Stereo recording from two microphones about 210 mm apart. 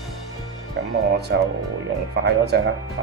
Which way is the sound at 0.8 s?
55° right (ahead or behind).